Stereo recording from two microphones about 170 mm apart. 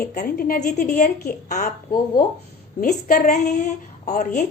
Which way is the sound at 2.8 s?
55° left (ahead or behind).